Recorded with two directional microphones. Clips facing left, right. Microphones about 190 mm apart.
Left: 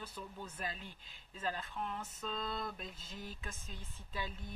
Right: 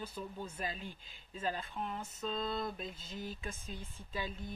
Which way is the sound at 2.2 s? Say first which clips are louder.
Right 4 dB; 25° right (ahead or behind).